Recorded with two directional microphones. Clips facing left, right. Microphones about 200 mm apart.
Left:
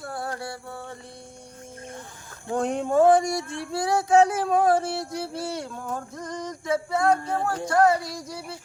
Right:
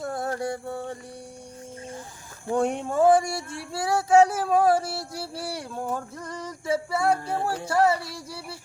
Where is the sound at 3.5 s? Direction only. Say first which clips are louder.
Left 2 dB; 5° right (ahead or behind).